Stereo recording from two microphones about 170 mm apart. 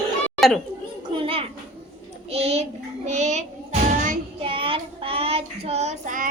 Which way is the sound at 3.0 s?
40° right (ahead or behind).